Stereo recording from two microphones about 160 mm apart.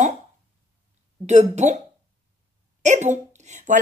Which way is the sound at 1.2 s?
45° right (ahead or behind).